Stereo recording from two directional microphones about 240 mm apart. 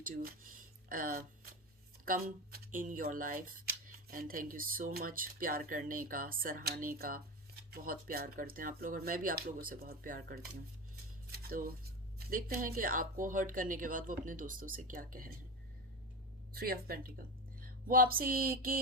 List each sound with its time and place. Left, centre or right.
0.0 s speech: right
11.3 s scissors: right
12.3 s speech: right
16.6 s speech: right